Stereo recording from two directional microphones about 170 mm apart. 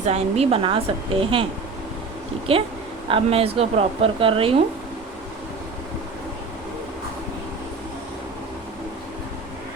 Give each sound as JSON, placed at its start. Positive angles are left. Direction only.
{"t": 0.0, "sound": "speech", "side_deg": -40}
{"t": 2.5, "sound": "speech", "side_deg": -35}